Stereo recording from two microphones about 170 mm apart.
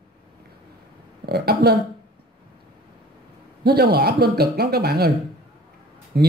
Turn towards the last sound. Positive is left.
turn(degrees=-70)  # may be behind; listen again after turning